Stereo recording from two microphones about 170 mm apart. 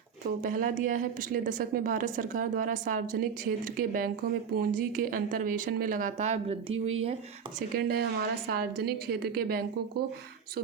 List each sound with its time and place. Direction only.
0.4 s a woman's voice: 50° right (ahead or behind); by 7.2 s 35° right (ahead or behind)
7.7 s a woman's voice: 65° right (ahead or behind)